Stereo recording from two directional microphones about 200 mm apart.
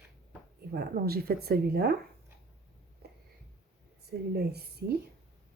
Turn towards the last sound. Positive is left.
turn(degrees=-50)  # may be behind; listen again after turning